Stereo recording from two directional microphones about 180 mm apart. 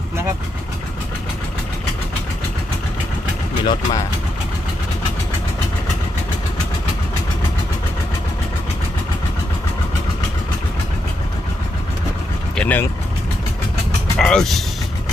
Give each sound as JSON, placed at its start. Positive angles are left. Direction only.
{"t": 3.6, "sound": "speech", "side_deg": 25}
{"t": 12.5, "sound": "vehicle", "side_deg": 10}
{"t": 14.2, "sound": "speech", "side_deg": 5}